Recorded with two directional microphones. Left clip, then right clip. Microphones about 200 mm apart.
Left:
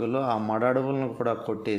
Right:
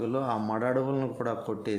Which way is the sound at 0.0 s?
5° right (ahead or behind).